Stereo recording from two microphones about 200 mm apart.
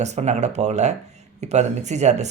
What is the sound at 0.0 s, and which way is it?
Speech, 35° right (ahead or behind).